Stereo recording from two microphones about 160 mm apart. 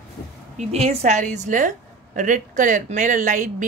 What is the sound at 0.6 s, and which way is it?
A woman's voice, 45° right (ahead or behind).